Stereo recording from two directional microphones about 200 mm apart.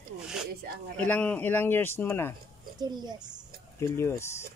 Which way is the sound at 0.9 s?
5° left (ahead or behind).